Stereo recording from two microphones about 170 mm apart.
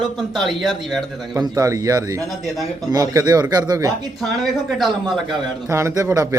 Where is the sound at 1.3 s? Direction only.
20° right (ahead or behind).